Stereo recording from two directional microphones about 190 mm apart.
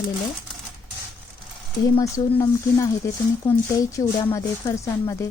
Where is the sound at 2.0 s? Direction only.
15° left (ahead or behind).